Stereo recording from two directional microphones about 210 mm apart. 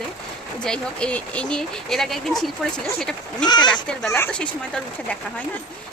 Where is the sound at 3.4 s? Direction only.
20° left (ahead or behind).